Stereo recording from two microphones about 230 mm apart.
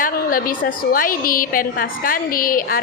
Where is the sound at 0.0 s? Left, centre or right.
Left.